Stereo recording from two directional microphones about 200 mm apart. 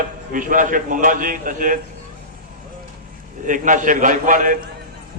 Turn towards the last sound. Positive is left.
turn(degrees=-40)  # may be behind; listen again after turning